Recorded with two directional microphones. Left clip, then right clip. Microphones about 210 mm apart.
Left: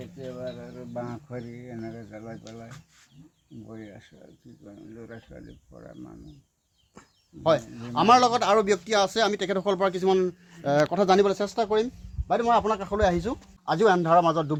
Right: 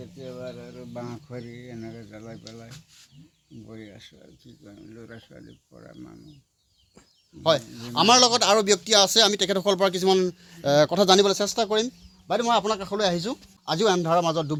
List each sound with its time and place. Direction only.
0.2 s speech: 5° right (ahead or behind)
3.7 s speech: 5° right (ahead or behind)
7.4 s a man's voice: 35° right (ahead or behind)